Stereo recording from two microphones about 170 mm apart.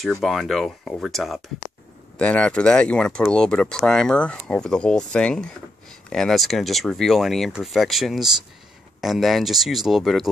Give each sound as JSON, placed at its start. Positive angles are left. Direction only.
{"t": 0.0, "sound": "speech", "side_deg": 0}